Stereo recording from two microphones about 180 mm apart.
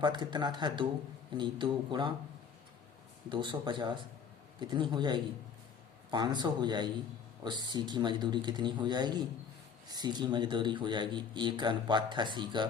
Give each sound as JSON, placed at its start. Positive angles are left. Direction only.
{"t": 0.0, "sound": "a man's voice", "side_deg": -25}
{"t": 3.2, "sound": "a man's voice", "side_deg": -25}